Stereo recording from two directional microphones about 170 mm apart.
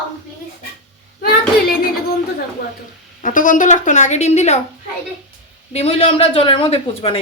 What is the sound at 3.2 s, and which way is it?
Speech, 50° left (ahead or behind).